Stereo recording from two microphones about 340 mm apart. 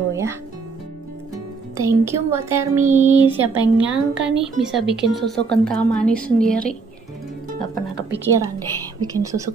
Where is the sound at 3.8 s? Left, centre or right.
Right.